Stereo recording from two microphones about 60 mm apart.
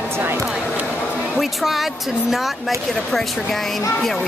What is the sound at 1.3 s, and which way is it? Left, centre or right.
Speech, centre.